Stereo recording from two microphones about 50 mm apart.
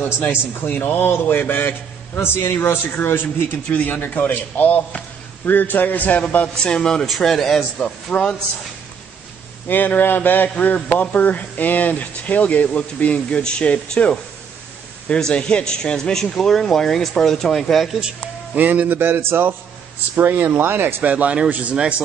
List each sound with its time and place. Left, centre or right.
0.3 s a man's voice: left
3.7 s a man's voice: left
6.5 s a man's voice: centre
7.1 s a man's voice: centre
7.8 s speech: left
9.7 s a man's voice: left; by 17.9 s centre
18.5 s speech: right
21.1 s speech: right